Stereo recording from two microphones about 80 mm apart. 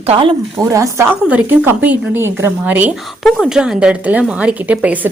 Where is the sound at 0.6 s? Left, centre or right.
Right.